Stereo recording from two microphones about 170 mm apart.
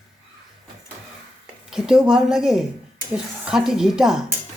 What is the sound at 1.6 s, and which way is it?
A woman's voice, 5° right (ahead or behind).